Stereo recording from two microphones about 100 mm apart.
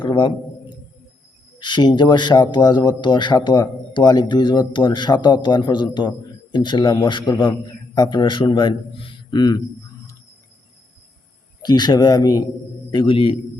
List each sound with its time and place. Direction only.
0.0 s a sound: 55° left (ahead or behind)
1.5 s a man's voice: 50° left (ahead or behind)
11.6 s speech: 45° left (ahead or behind)
12.9 s a man's voice: 55° left (ahead or behind)